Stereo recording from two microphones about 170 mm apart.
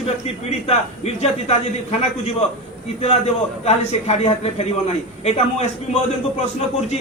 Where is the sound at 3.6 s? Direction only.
40° left (ahead or behind).